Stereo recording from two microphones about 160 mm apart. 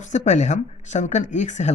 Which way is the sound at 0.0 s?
50° left (ahead or behind).